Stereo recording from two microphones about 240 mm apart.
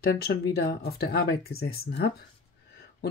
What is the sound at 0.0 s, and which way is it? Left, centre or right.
Speech, left.